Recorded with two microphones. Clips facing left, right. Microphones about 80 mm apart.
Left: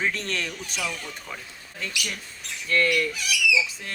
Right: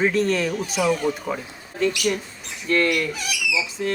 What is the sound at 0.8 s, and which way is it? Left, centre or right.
Speech, right.